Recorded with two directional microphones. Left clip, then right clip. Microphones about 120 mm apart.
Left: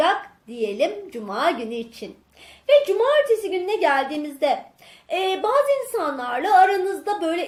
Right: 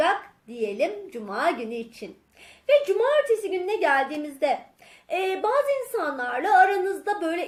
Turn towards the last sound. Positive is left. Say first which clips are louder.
# left 3 dB
turn(degrees=-20)  # may be behind; listen again after turning